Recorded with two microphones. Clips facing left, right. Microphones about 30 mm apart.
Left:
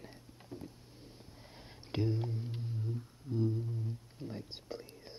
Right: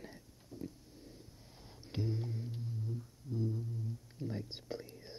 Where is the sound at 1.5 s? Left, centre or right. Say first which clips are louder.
Left 5 dB; left.